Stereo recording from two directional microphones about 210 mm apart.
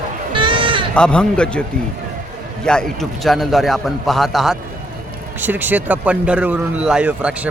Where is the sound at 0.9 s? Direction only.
5° left (ahead or behind).